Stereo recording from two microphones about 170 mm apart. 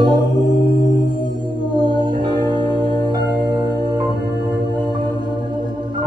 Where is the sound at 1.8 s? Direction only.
25° right (ahead or behind).